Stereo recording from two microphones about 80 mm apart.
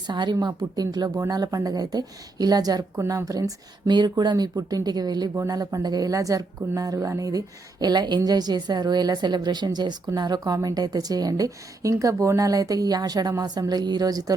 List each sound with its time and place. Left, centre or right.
0.1 s speech: right
0.4 s a woman's voice: right
3.8 s a woman's voice: right